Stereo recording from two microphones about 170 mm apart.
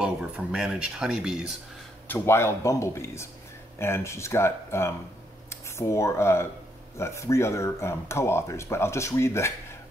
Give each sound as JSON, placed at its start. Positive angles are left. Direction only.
{"t": 0.0, "sound": "speech", "side_deg": -5}
{"t": 2.0, "sound": "speech", "side_deg": 15}